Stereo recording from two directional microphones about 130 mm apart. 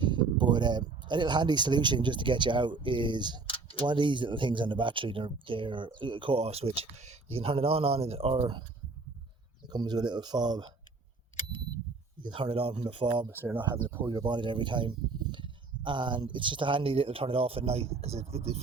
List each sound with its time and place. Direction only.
0.0 s speech: 35° right (ahead or behind)
9.6 s speech: 30° right (ahead or behind)
12.2 s speech: 40° right (ahead or behind)
13.3 s speech: 15° right (ahead or behind)
14.1 s speech: 35° right (ahead or behind); by 18.6 s 50° right (ahead or behind)